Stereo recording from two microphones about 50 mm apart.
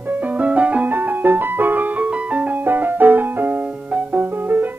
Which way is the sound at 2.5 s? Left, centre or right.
Right.